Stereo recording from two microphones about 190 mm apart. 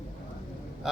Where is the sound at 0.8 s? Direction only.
Centre (ahead or behind).